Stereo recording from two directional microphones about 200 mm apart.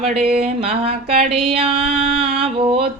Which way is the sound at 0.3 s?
30° right (ahead or behind).